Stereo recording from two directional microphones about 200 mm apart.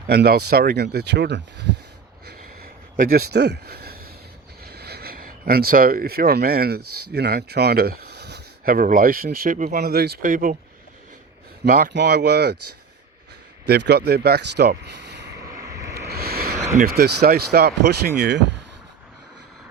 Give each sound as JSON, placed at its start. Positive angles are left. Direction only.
{"t": 0.1, "sound": "speech", "side_deg": -50}
{"t": 2.2, "sound": "a sound", "side_deg": -50}
{"t": 4.6, "sound": "speech", "side_deg": -55}
{"t": 11.6, "sound": "speech", "side_deg": -45}
{"t": 11.9, "sound": "speech", "side_deg": -55}
{"t": 13.7, "sound": "speech", "side_deg": -55}
{"t": 15.4, "sound": "vehicle", "side_deg": -15}
{"t": 16.0, "sound": "a sound", "side_deg": -50}
{"t": 16.6, "sound": "speech", "side_deg": -35}